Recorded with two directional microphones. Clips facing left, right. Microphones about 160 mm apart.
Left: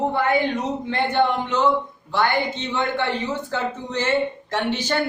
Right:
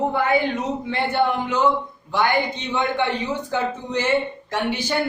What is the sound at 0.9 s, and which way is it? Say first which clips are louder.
A man's voice: left 1 dB; 10° right (ahead or behind).